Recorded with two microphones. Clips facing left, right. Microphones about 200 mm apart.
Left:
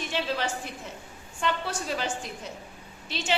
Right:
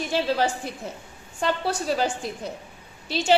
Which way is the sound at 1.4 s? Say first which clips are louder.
Right 4 dB; 35° right (ahead or behind).